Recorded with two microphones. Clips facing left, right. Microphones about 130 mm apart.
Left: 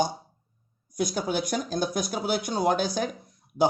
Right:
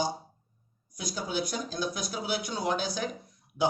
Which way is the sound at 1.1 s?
55° left (ahead or behind).